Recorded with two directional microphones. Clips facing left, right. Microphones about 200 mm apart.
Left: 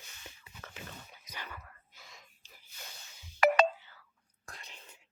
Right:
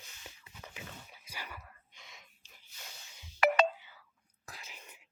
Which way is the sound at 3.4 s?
45° left (ahead or behind).